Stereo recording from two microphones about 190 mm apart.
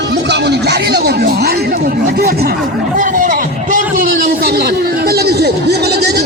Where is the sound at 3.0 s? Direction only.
45° right (ahead or behind).